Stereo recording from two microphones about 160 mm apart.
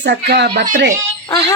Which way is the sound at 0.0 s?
90° right.